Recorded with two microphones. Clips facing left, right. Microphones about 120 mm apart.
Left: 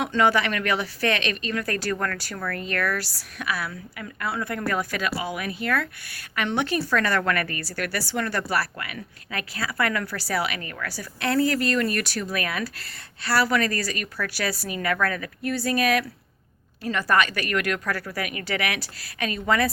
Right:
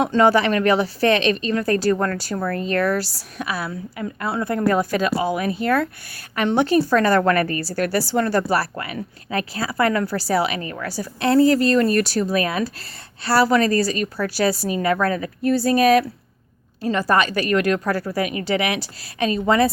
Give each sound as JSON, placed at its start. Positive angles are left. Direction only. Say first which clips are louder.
{"t": 0.0, "sound": "a woman's voice", "louder": "right 5 dB", "side_deg": -35}